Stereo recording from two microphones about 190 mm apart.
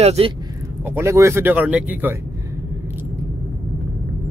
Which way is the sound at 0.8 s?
15° right (ahead or behind).